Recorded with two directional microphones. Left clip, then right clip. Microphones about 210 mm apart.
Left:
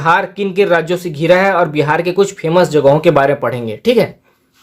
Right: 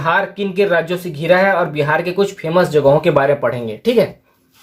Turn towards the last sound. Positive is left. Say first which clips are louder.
# left 2 dB
turn(degrees=45)  # may be behind; listen again after turning